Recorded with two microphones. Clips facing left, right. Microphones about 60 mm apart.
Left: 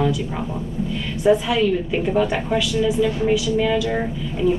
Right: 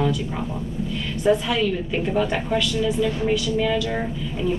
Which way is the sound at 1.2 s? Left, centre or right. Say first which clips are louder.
Left 3 dB; centre.